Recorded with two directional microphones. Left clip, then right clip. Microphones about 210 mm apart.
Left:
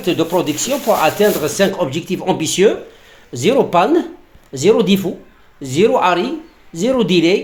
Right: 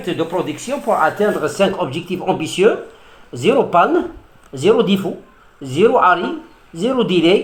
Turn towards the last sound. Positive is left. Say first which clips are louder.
# even
turn(degrees=35)  # may be behind; listen again after turning